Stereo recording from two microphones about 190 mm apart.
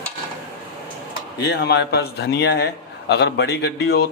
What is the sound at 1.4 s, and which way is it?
A man's voice, 60° left (ahead or behind).